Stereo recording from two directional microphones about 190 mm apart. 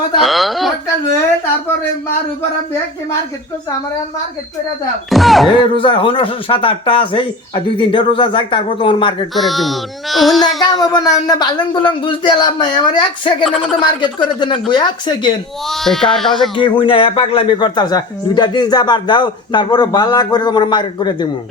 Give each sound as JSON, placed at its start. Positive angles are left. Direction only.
{"t": 0.2, "sound": "a woman's voice", "side_deg": 0}
{"t": 5.0, "sound": "speech", "side_deg": 0}
{"t": 5.5, "sound": "speech", "side_deg": 25}
{"t": 9.3, "sound": "speech", "side_deg": 0}
{"t": 10.6, "sound": "speech", "side_deg": 20}
{"t": 13.4, "sound": "speech", "side_deg": 0}
{"t": 13.8, "sound": "speech", "side_deg": 25}
{"t": 15.7, "sound": "speech", "side_deg": 0}
{"t": 16.6, "sound": "speech", "side_deg": 25}